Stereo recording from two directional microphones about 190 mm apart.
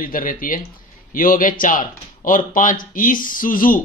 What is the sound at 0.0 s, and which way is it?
Speech, 50° left (ahead or behind).